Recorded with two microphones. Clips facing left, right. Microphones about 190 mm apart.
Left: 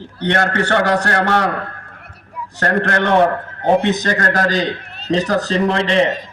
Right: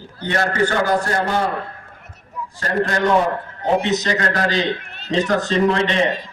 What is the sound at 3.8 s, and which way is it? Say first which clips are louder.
A man's voice: left 2 dB; 55° left (ahead or behind).